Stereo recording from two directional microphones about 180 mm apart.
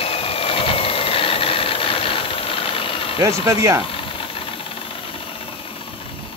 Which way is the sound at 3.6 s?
15° right (ahead or behind).